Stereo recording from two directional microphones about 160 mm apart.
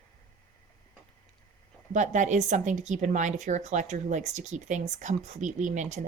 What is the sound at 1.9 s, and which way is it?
A woman's voice, 50° right (ahead or behind).